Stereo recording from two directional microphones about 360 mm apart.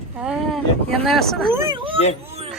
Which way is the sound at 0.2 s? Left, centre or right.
Centre.